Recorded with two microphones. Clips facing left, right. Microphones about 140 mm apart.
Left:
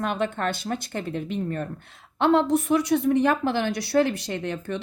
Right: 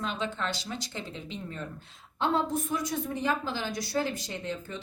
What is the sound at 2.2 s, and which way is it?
A woman's voice, 75° left (ahead or behind).